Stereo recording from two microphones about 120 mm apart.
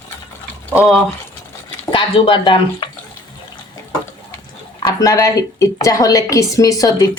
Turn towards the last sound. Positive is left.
turn(degrees=30)  # may be behind; listen again after turning